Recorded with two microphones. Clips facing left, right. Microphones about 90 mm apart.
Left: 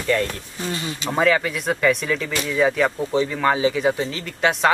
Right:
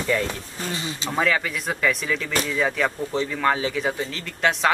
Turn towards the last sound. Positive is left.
turn(degrees=0)  # may be behind; listen again after turning